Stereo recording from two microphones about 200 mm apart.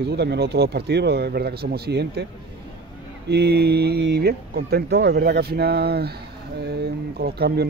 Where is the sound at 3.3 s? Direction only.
55° right (ahead or behind).